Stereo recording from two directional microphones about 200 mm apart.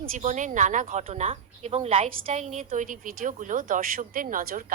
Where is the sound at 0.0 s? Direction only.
40° right (ahead or behind).